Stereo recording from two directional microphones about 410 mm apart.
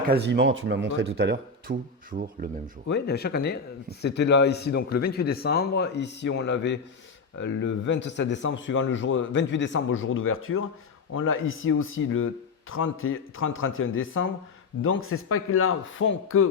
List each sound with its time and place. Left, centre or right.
0.1 s speech: right
2.9 s speech: left